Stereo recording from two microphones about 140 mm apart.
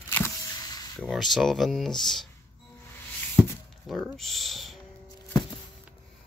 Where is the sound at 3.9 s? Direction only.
Centre (ahead or behind).